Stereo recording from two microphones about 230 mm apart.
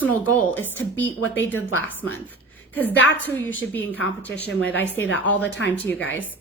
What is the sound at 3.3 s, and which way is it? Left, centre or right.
A woman's voice, centre.